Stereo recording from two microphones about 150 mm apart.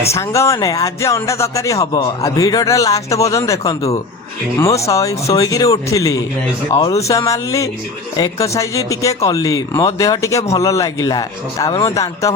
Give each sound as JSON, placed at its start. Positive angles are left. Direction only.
{"t": 0.0, "sound": "speech", "side_deg": 20}